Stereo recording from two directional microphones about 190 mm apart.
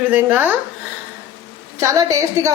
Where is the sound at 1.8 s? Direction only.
15° right (ahead or behind).